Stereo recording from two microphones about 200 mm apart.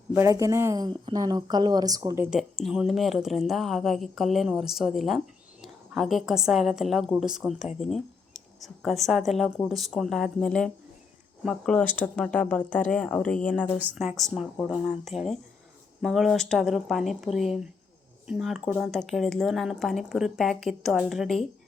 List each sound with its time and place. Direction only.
0.1 s speech: 15° right (ahead or behind); by 13.7 s 5° left (ahead or behind)
13.7 s speech: 5° right (ahead or behind)